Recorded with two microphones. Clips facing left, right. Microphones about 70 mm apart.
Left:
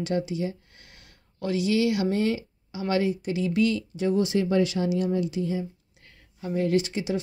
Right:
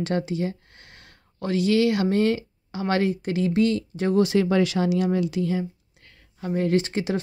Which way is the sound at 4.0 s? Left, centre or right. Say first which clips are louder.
Right 3 dB; right.